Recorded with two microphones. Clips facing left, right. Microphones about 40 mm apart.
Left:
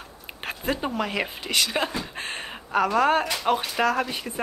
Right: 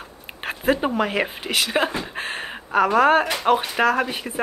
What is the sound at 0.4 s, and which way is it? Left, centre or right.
Speech, right.